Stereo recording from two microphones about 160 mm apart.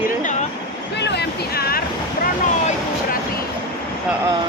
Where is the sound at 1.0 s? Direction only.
90° left; by 1.8 s 75° left (ahead or behind).